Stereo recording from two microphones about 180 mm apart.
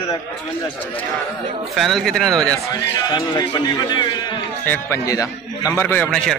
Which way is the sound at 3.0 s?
25° left (ahead or behind).